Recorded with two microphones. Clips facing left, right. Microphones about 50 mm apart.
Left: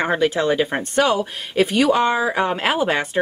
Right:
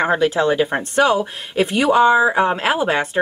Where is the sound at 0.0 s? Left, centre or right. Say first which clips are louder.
Right 2 dB; centre.